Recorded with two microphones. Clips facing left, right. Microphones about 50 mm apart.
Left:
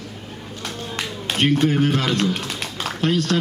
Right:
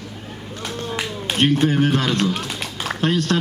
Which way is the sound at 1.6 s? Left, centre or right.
Right.